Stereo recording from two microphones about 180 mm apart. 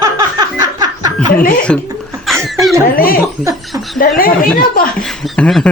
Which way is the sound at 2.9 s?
55° left (ahead or behind).